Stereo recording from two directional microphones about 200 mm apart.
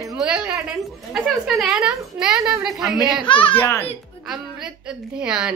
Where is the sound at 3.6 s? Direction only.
10° left (ahead or behind).